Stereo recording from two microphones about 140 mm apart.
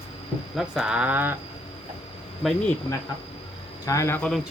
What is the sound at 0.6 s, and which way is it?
Speech, 5° right (ahead or behind).